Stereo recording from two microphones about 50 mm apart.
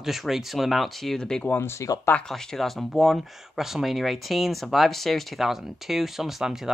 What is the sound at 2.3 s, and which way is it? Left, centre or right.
Speech, centre.